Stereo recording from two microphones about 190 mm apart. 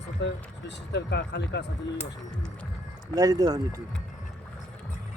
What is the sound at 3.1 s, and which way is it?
Speech, 20° right (ahead or behind).